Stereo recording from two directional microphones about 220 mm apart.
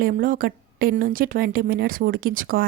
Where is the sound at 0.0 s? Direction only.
40° right (ahead or behind).